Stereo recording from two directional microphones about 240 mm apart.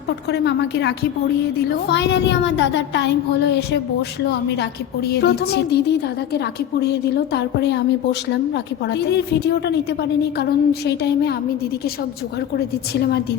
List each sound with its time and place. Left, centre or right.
0.3 s a woman's voice: left
12.5 s a woman's voice: left